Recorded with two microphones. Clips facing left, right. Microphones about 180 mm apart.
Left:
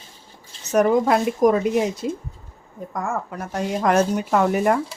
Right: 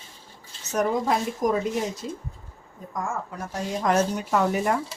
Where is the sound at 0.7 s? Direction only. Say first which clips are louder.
Left 7 dB; 65° left (ahead or behind).